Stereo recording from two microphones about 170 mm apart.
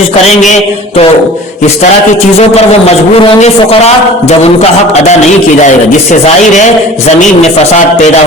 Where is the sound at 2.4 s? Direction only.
40° left (ahead or behind).